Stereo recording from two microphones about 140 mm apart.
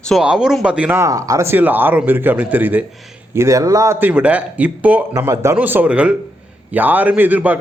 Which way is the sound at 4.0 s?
10° right (ahead or behind).